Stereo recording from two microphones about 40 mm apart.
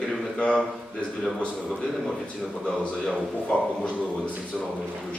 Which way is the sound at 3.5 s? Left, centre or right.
Left.